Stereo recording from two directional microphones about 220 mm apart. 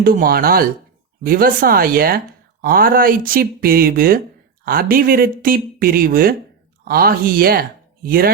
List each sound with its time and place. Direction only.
0.0 s speech: 45° right (ahead or behind)